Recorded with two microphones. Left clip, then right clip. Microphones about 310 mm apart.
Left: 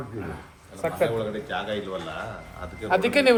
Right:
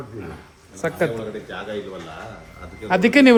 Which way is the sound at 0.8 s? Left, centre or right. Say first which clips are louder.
Right 3 dB; right.